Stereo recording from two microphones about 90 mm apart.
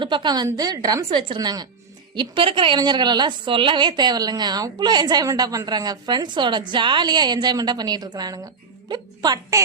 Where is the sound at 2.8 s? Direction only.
55° right (ahead or behind).